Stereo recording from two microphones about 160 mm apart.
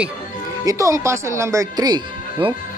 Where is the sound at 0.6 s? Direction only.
20° right (ahead or behind).